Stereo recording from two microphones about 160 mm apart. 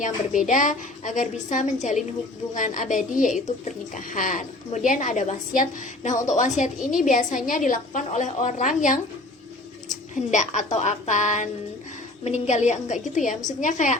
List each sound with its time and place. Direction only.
0.0 s a woman's voice: 55° left (ahead or behind)